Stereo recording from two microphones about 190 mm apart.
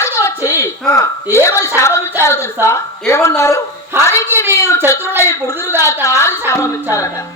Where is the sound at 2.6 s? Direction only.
15° left (ahead or behind).